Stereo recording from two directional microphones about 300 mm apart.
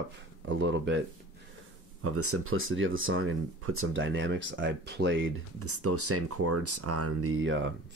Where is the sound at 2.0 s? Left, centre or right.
Right.